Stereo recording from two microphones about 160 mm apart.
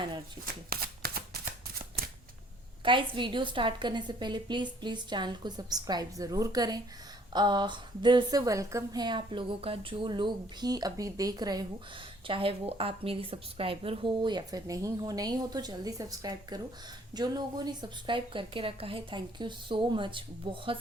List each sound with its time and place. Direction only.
0.4 s a woman's voice: 30° right (ahead or behind)
0.7 s shuffling cards: 70° right (ahead or behind)
2.8 s a woman's voice: 30° right (ahead or behind)